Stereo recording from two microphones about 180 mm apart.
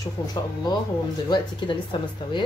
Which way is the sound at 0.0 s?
20° left (ahead or behind).